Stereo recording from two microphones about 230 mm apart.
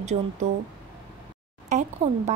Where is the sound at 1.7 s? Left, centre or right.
Right.